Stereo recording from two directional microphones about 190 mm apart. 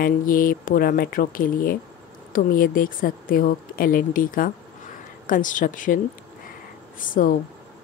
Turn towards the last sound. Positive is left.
turn(degrees=45)  # may be behind; listen again after turning